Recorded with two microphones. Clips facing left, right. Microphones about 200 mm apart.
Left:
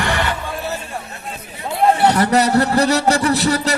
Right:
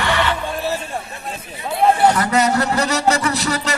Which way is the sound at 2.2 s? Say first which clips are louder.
Left 3 dB; 35° left (ahead or behind).